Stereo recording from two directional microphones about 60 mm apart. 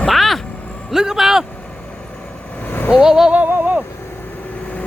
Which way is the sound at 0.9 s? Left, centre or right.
Centre.